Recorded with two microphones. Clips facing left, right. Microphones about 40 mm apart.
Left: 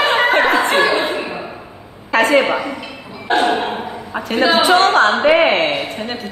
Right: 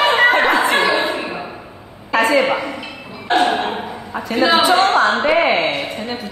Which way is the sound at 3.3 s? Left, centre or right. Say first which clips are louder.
Even; centre.